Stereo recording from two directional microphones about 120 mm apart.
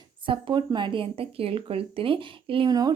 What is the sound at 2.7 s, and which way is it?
Speech, 35° right (ahead or behind).